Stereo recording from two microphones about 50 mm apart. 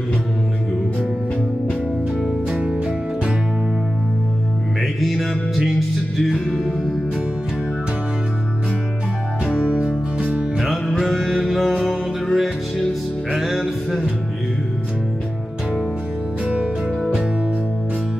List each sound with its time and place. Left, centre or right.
2.5 s music: right
5.0 s music: centre
9.4 s music: centre
10.6 s music: centre